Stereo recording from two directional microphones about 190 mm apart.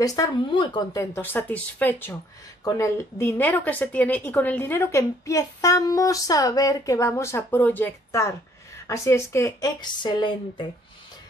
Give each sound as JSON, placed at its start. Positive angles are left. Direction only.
{"t": 0.0, "sound": "a woman's voice", "side_deg": 20}